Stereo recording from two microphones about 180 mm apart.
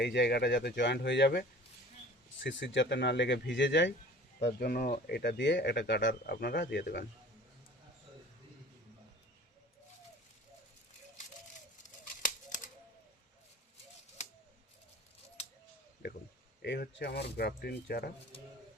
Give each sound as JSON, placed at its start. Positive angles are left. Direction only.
{"t": 0.0, "sound": "speech", "side_deg": 70}
{"t": 2.4, "sound": "speech", "side_deg": 90}
{"t": 4.4, "sound": "speech", "side_deg": 60}
{"t": 12.2, "sound": "typewriter", "side_deg": 50}
{"t": 16.6, "sound": "speech", "side_deg": 65}